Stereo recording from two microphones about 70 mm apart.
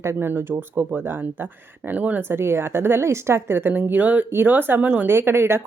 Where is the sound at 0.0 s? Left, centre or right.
Right.